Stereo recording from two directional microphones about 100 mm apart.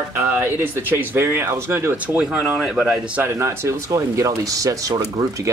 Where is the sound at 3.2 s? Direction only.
30° right (ahead or behind).